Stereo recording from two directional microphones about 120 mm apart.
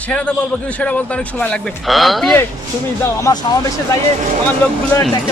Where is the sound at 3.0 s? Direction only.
30° left (ahead or behind).